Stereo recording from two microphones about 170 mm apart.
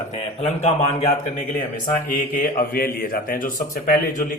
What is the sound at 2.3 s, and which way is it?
A man's voice, 55° left (ahead or behind).